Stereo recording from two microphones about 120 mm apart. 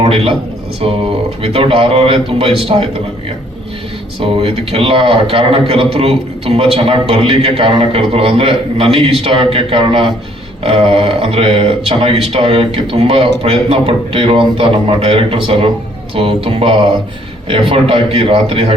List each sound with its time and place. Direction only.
0.0 s speech: 50° right (ahead or behind)
1.4 s speech: 50° right (ahead or behind)
4.2 s speech: 50° right (ahead or behind)